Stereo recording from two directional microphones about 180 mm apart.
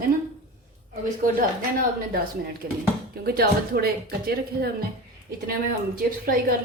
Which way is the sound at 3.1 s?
60° right (ahead or behind).